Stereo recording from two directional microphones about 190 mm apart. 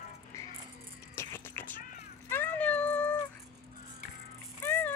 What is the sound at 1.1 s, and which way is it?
Music, 15° left (ahead or behind).